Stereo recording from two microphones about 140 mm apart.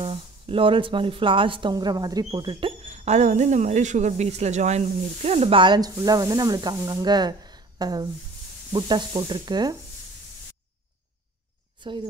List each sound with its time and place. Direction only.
0.0 s speech: 40° right (ahead or behind)
2.8 s speech: 50° right (ahead or behind); by 9.8 s 30° right (ahead or behind)